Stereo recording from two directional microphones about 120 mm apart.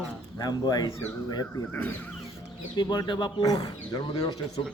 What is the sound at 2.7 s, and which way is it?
Speech, 40° left (ahead or behind).